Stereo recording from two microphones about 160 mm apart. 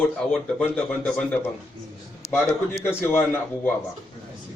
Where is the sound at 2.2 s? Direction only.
40° left (ahead or behind).